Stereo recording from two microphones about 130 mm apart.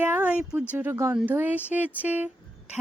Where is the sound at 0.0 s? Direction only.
15° right (ahead or behind).